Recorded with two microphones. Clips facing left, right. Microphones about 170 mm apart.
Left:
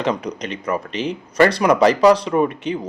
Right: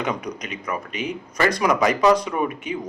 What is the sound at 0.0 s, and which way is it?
Speech, 30° left (ahead or behind).